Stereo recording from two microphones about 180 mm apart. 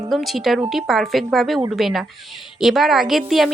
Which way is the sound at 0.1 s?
Centre (ahead or behind).